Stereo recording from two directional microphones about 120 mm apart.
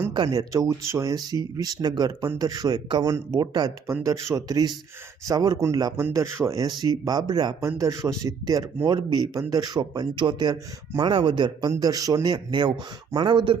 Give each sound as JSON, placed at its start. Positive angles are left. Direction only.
{"t": 0.3, "sound": "speech", "side_deg": -30}
{"t": 11.7, "sound": "speech", "side_deg": -30}